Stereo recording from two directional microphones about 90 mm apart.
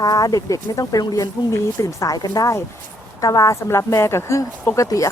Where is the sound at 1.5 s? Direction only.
35° left (ahead or behind).